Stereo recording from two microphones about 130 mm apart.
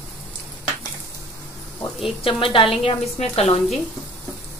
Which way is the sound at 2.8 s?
55° left (ahead or behind).